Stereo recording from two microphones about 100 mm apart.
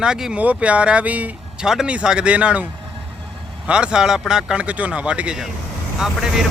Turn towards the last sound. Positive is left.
turn(degrees=-5)  # may be behind; listen again after turning